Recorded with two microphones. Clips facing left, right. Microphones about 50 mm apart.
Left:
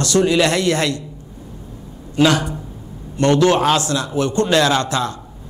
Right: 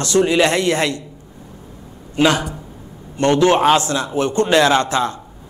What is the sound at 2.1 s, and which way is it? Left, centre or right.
A man's voice, right.